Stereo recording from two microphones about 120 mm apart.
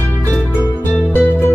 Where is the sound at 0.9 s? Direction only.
20° left (ahead or behind).